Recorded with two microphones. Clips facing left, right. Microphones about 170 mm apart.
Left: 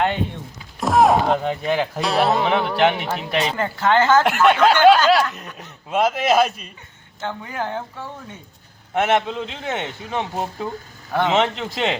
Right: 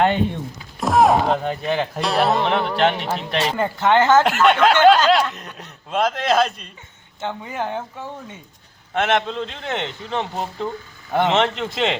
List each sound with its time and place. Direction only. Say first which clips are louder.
0.8 s a sound: even; centre (ahead or behind)
1.6 s speech: left 1 dB; 5° left (ahead or behind)
3.8 s speech: right 1 dB; 20° right (ahead or behind)
4.2 s speech: even; centre (ahead or behind)
7.2 s speech: right 1 dB; 20° right (ahead or behind)
8.9 s a man's voice: left 1 dB; 10° left (ahead or behind)